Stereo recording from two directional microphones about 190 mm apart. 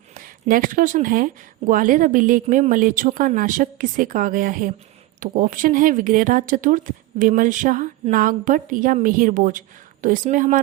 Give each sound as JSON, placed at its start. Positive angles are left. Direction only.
{"t": 0.1, "sound": "speech", "side_deg": -45}